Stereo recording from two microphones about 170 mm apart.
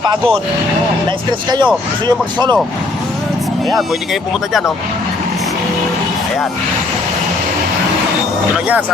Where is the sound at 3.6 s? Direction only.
Centre (ahead or behind).